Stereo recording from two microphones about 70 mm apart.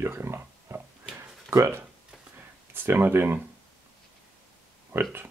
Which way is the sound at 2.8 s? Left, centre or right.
Right.